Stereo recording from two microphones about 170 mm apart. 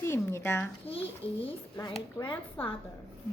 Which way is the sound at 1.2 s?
35° left (ahead or behind).